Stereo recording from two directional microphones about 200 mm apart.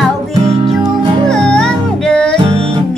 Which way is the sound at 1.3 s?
5° left (ahead or behind).